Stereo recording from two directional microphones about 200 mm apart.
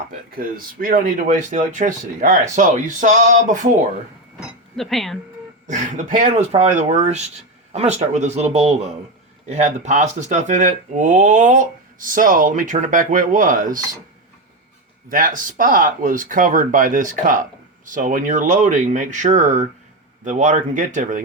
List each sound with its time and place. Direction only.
0.3 s speech: 45° right (ahead or behind)
4.4 s a sound: centre (ahead or behind)
5.6 s speech: 40° right (ahead or behind)
15.1 s speech: 45° right (ahead or behind)